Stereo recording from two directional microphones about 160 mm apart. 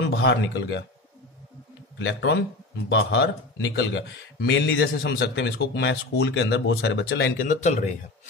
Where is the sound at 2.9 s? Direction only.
90° left.